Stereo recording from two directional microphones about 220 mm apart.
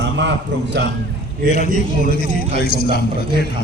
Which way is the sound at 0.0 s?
55° right (ahead or behind).